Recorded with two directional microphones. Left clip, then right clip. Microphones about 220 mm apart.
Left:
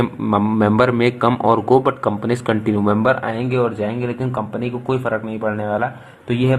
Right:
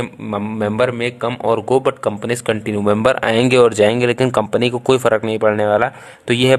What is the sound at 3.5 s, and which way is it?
Speech, 45° right (ahead or behind).